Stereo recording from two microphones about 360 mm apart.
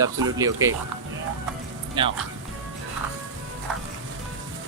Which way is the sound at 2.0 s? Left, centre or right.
Centre.